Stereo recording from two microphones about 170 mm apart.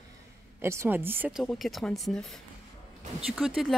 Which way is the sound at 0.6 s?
15° right (ahead or behind).